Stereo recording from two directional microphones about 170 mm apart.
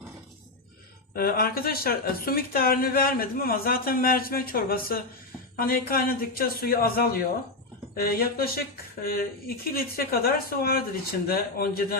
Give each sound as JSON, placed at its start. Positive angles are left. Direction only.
{"t": 1.1, "sound": "speech", "side_deg": 60}